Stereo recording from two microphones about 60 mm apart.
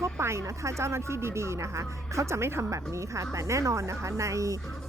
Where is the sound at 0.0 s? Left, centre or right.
Right.